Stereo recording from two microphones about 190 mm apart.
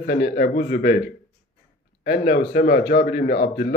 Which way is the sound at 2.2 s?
50° left (ahead or behind).